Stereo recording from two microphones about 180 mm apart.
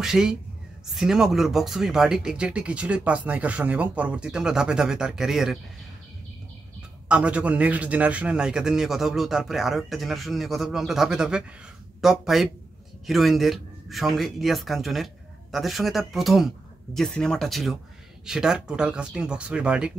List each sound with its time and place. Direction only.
0.0 s speech: 5° right (ahead or behind)
7.1 s speech: 5° right (ahead or behind)